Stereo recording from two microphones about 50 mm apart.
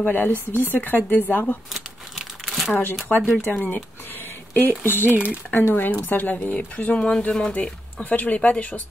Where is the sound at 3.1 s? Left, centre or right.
Left.